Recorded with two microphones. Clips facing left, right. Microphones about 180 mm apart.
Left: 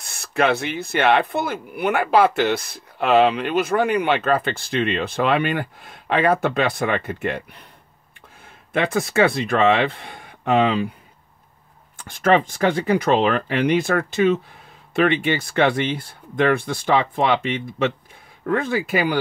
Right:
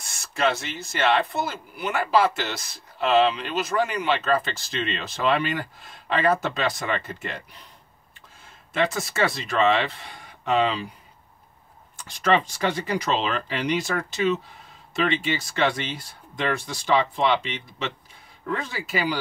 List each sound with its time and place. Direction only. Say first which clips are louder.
0.0 s speech: left 4 dB; 60° left (ahead or behind)
12.0 s speech: left 4 dB; 55° left (ahead or behind)